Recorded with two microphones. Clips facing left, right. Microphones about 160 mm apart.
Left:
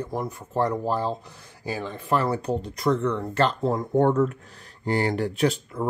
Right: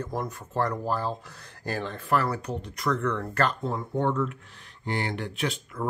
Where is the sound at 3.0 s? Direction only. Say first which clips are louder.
Left 3 dB; 20° left (ahead or behind); by 5.8 s 40° left (ahead or behind).